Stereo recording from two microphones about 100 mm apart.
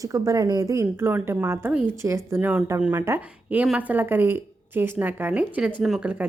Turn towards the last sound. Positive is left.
turn(degrees=-5)  # may be behind; listen again after turning